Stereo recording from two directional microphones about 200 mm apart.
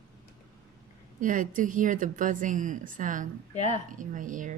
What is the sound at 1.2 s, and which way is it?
Speech, 40° right (ahead or behind).